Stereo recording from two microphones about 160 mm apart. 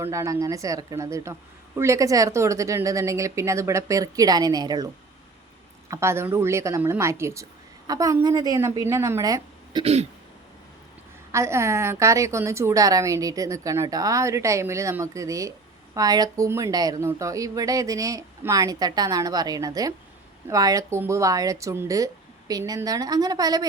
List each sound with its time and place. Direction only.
0.0 s speech: 20° right (ahead or behind)
5.9 s a woman's voice: 15° right (ahead or behind)
9.8 s speech: 40° right (ahead or behind)
11.3 s speech: 15° right (ahead or behind)